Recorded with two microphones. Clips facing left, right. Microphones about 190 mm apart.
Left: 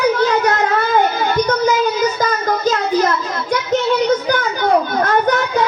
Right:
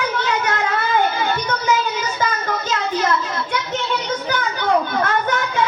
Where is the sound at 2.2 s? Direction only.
40° left (ahead or behind).